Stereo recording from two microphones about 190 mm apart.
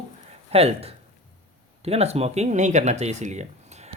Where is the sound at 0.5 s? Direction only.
30° right (ahead or behind).